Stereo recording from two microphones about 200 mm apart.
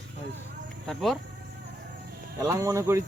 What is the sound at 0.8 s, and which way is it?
Speech, centre (ahead or behind).